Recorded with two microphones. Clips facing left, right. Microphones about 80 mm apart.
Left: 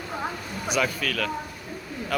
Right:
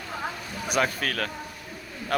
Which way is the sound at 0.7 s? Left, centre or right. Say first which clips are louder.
Even; right.